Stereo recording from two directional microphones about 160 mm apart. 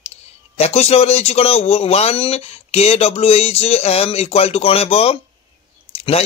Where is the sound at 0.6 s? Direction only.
40° left (ahead or behind).